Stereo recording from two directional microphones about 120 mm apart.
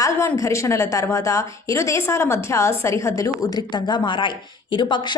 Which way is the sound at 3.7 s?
40° left (ahead or behind).